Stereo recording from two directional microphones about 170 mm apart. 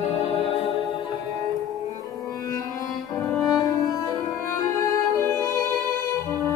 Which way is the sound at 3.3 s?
Centre (ahead or behind).